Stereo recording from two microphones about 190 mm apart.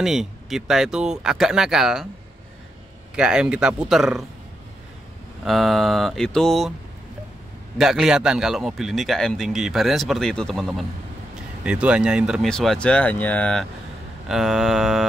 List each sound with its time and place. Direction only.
0.0 s a man's voice: centre (ahead or behind)
3.2 s a man's voice: 5° right (ahead or behind)
5.4 s a man's voice: centre (ahead or behind)
7.7 s a man's voice: centre (ahead or behind)